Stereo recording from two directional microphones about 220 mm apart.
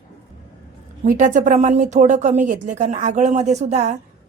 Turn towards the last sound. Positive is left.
turn(degrees=-30)  # may be behind; listen again after turning